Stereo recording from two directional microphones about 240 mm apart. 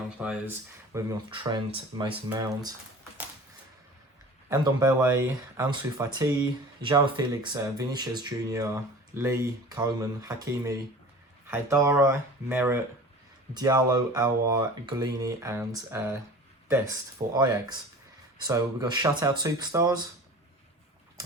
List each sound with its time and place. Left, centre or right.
0.2 s speech: centre
0.9 s speech: centre
4.4 s speech: centre
17.3 s speech: centre